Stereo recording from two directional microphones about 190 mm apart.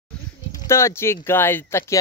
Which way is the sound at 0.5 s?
15° left (ahead or behind).